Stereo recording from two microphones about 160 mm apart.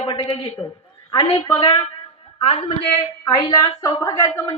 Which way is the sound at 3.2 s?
25° left (ahead or behind).